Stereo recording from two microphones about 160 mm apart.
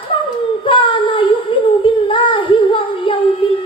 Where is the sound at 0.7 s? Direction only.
30° left (ahead or behind).